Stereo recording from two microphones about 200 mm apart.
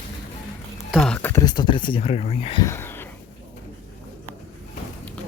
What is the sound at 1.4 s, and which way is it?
Speech, 20° left (ahead or behind).